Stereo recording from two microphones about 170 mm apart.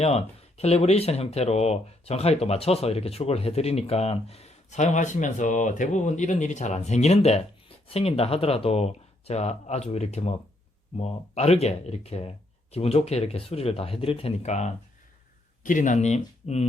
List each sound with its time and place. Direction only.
0.0 s speech: 40° left (ahead or behind)